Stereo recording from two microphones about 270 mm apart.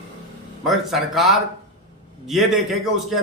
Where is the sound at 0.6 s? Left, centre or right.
Centre.